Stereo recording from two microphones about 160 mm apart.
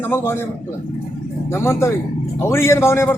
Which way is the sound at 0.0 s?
15° left (ahead or behind).